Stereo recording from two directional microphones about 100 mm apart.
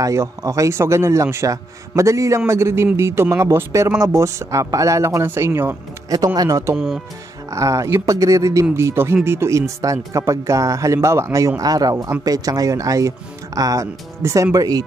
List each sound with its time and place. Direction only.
0.0 s a man's voice: 30° right (ahead or behind)
6.0 s speech: 40° right (ahead or behind)